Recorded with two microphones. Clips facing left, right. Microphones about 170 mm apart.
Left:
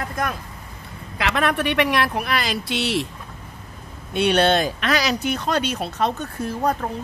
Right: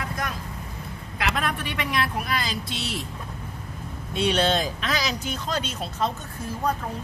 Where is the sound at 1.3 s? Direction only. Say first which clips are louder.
Left 11 dB; 75° left (ahead or behind).